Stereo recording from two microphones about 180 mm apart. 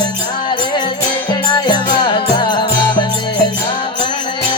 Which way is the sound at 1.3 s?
25° left (ahead or behind).